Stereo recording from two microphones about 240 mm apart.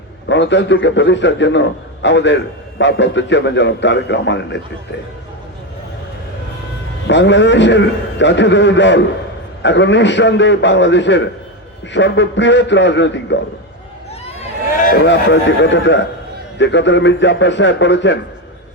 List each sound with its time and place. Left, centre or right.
0.3 s a man's voice: left
7.1 s a man's voice: left
14.3 s a sound: left
15.0 s a man's voice: left